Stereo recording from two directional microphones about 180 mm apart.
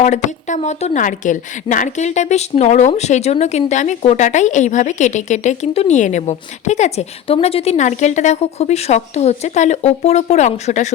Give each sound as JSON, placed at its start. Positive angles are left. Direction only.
{"t": 0.0, "sound": "a woman's voice", "side_deg": 40}